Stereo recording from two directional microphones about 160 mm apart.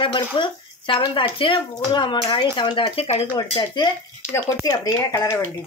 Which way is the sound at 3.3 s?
30° left (ahead or behind).